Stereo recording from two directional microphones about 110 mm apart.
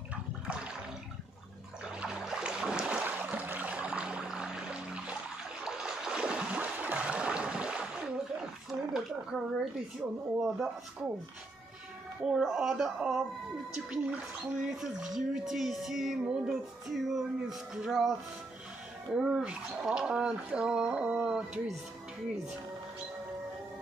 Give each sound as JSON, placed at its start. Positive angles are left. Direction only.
{"t": 0.1, "sound": "water", "side_deg": -10}
{"t": 1.9, "sound": "a sound", "side_deg": -5}
{"t": 10.4, "sound": "speech", "side_deg": -5}
{"t": 12.3, "sound": "speech", "side_deg": -5}
{"t": 19.1, "sound": "speech", "side_deg": -10}